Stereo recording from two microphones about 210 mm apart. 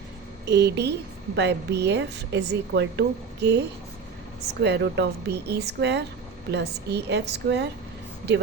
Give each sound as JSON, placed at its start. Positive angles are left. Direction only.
{"t": 0.4, "sound": "a woman's voice", "side_deg": -55}
{"t": 4.6, "sound": "a woman's voice", "side_deg": -55}